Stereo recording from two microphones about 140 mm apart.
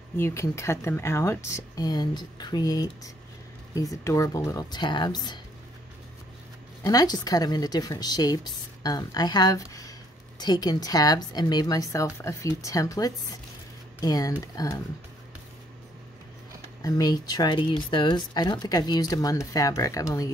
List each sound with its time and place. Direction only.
0.2 s speech: 20° left (ahead or behind)
6.8 s speech: 25° left (ahead or behind)
16.8 s speech: 30° left (ahead or behind)